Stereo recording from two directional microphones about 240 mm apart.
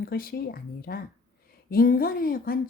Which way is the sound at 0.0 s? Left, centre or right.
Left.